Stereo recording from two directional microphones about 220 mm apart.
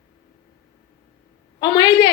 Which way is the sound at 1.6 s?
20° left (ahead or behind).